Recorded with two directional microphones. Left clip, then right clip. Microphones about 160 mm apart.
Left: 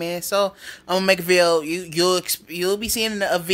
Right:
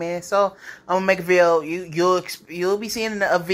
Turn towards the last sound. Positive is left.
turn(degrees=35)  # may be behind; listen again after turning